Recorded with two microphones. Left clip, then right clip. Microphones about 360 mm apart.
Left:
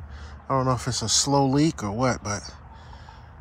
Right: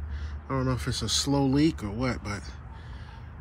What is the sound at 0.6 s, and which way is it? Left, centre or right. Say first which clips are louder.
Speech: left 5 dB; centre.